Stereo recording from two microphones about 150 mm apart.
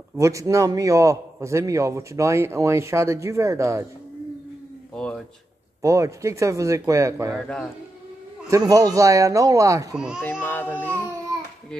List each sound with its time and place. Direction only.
0.2 s a man's voice: 20° right (ahead or behind)
4.9 s speech: 5° left (ahead or behind)
5.8 s a man's voice: 20° right (ahead or behind)
7.3 s speech: 5° left (ahead or behind)
8.5 s a man's voice: 20° right (ahead or behind)
9.9 s speech: 5° right (ahead or behind)
10.2 s speech: 15° left (ahead or behind)